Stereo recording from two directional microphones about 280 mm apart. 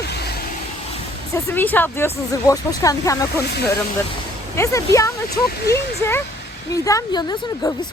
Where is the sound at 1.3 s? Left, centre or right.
Centre.